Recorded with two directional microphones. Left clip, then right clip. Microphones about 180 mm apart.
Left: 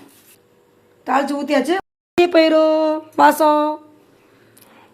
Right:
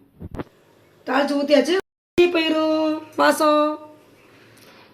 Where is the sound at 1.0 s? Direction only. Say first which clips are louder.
Left 2 dB; 65° left (ahead or behind).